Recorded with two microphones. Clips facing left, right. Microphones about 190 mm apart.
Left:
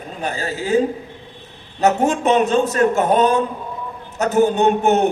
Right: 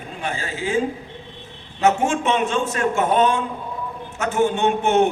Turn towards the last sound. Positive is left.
turn(degrees=40)  # may be behind; listen again after turning